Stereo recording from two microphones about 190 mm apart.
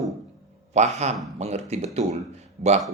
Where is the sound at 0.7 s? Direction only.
35° right (ahead or behind).